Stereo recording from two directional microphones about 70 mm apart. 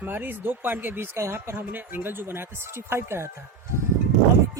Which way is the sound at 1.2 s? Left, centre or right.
Right.